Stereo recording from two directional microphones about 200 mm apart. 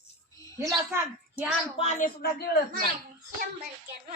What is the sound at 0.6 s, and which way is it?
Speech, 10° right (ahead or behind).